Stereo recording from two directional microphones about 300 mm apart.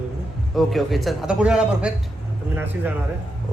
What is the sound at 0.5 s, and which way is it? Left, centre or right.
A man's voice, centre.